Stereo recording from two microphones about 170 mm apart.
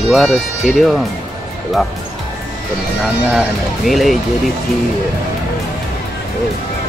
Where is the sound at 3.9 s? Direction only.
Centre (ahead or behind).